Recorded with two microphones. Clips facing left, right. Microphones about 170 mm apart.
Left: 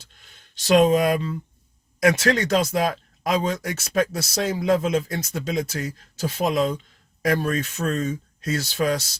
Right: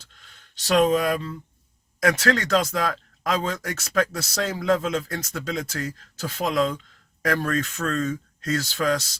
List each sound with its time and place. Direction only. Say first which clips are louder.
0.3 s speech: left 3 dB; 20° left (ahead or behind)